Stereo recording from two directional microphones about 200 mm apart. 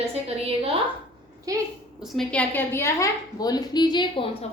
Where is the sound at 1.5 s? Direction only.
15° right (ahead or behind).